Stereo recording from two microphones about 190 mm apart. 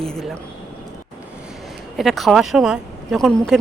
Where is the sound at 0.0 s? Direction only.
5° left (ahead or behind).